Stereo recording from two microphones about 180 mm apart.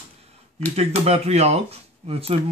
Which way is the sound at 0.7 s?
35° right (ahead or behind).